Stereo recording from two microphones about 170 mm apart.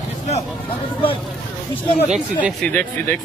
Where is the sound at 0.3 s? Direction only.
35° left (ahead or behind).